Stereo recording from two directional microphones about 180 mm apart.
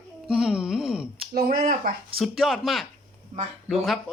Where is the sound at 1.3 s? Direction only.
50° right (ahead or behind).